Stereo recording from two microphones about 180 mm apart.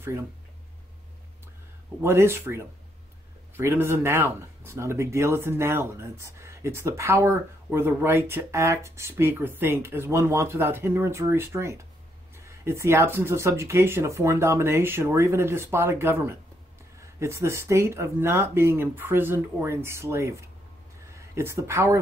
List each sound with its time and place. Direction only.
2.0 s speech: 15° right (ahead or behind)